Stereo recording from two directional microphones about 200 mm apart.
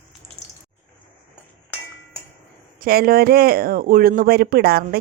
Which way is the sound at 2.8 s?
50° right (ahead or behind).